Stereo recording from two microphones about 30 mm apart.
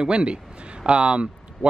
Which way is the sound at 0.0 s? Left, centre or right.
Right.